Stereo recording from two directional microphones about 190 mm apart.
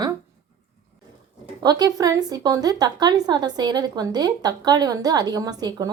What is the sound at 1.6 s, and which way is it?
A woman's voice, 20° right (ahead or behind).